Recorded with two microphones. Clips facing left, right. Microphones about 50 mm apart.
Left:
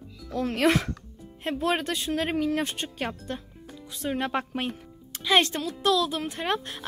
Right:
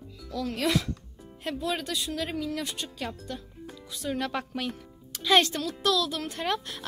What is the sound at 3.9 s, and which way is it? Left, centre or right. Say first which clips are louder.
Speech: left 3 dB; left.